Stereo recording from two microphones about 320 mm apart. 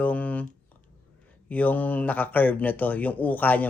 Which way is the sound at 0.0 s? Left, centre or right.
Centre.